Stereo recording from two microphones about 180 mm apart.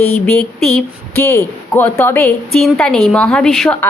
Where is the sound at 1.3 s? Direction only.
10° left (ahead or behind).